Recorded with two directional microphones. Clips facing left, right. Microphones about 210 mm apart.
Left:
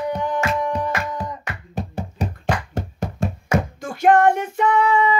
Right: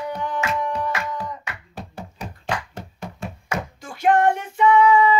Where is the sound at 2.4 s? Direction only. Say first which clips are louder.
Left 3 dB; 40° left (ahead or behind).